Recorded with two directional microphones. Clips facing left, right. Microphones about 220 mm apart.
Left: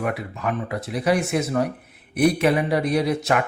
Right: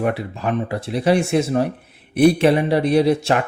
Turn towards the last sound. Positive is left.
turn(degrees=-30)  # may be behind; listen again after turning